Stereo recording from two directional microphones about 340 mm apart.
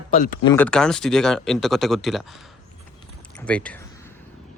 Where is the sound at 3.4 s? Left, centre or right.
Centre.